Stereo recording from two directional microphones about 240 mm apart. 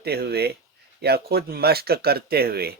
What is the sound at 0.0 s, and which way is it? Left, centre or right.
Speech, right.